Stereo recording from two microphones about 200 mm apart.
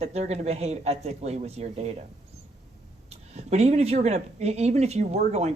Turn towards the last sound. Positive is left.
turn(degrees=-35)  # may be behind; listen again after turning